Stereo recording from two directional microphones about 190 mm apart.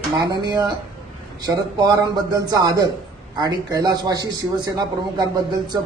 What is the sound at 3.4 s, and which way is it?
A man's voice, 20° right (ahead or behind).